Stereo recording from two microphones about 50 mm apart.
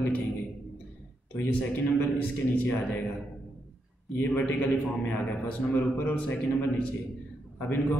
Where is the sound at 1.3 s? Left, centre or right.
Left.